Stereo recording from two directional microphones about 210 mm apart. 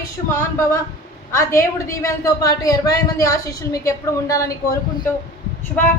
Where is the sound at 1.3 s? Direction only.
15° left (ahead or behind).